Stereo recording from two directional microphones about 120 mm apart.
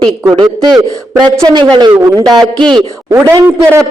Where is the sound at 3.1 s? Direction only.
25° right (ahead or behind).